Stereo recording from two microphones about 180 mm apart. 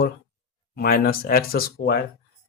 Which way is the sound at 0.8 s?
55° left (ahead or behind).